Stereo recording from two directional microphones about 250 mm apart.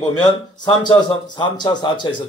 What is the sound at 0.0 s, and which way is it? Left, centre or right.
Speech, centre.